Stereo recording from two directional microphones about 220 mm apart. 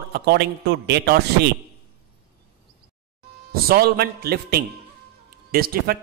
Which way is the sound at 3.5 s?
45° right (ahead or behind).